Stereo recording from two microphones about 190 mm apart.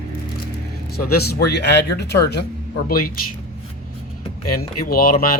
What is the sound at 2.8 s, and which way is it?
Speech, 50° left (ahead or behind).